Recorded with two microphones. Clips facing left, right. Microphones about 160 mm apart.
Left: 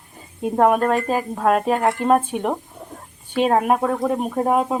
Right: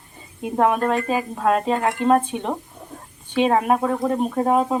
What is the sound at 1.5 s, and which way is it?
Speech, 15° left (ahead or behind).